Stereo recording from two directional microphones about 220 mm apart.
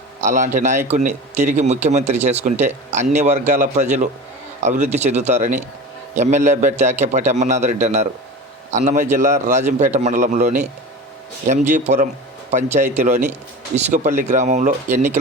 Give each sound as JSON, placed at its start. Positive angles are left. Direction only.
{"t": 0.2, "sound": "speech", "side_deg": -35}